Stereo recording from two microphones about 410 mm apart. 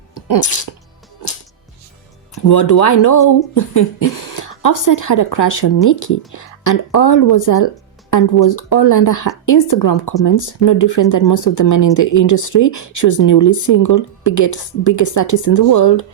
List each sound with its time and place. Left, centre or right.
0.1 s speech: left
2.3 s speech: left
4.3 s a sound: left
4.6 s speech: left